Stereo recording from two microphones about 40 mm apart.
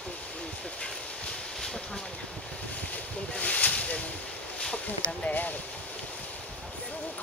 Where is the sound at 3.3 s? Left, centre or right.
Left.